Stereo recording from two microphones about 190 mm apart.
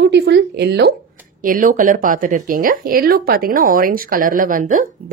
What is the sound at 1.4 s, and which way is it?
Speech, 45° right (ahead or behind).